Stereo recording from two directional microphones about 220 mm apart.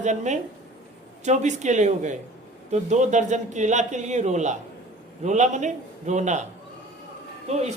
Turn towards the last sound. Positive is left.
turn(degrees=-30)  # may be behind; listen again after turning